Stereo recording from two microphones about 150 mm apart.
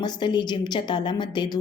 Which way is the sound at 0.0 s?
30° left (ahead or behind).